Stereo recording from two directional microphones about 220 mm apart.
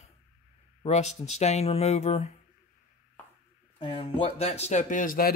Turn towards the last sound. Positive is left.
turn(degrees=35)  # may be behind; listen again after turning